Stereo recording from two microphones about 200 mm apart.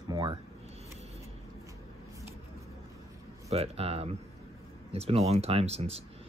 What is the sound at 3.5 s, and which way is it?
Speech, 30° right (ahead or behind).